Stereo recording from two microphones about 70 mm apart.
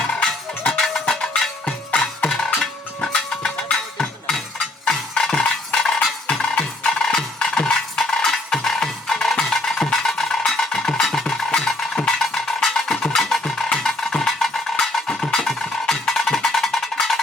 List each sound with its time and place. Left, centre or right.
0.7 s music: centre